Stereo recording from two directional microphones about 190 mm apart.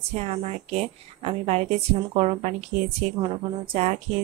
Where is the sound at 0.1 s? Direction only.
35° right (ahead or behind).